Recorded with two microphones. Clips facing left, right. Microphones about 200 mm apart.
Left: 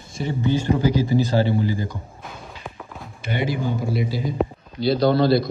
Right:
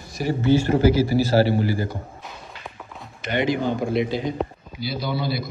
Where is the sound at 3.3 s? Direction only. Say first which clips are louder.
Right 3 dB; 60° right (ahead or behind).